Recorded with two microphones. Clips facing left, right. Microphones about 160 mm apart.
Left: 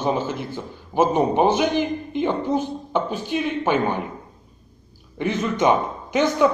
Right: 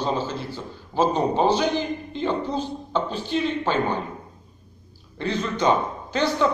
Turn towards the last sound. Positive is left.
turn(degrees=15)  # may be behind; listen again after turning